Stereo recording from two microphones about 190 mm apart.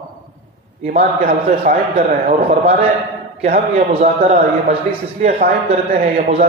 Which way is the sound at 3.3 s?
35° right (ahead or behind).